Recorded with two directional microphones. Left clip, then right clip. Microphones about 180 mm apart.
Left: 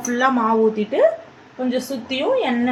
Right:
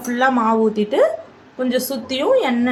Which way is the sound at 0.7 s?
20° right (ahead or behind).